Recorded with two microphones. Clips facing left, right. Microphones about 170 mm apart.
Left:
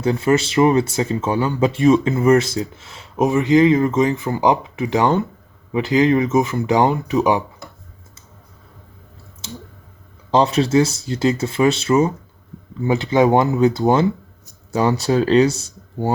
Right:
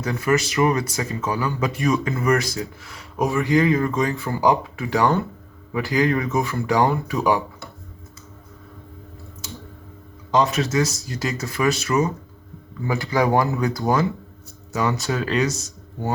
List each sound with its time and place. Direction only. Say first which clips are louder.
0.0 s speech: left 4 dB; 25° left (ahead or behind)
10.3 s speech: left 5 dB; 30° left (ahead or behind)